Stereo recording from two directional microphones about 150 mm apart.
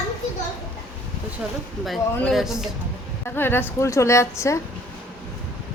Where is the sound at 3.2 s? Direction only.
15° left (ahead or behind).